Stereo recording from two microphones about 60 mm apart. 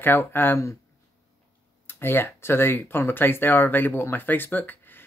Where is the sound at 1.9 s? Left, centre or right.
Left.